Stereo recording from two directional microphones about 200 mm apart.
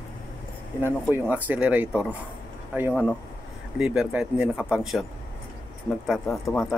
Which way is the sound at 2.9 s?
5° left (ahead or behind).